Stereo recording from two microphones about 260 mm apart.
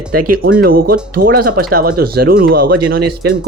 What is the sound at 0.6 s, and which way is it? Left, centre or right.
Speech, right.